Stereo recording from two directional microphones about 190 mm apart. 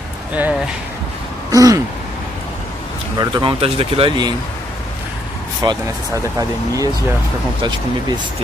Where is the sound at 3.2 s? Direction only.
25° right (ahead or behind).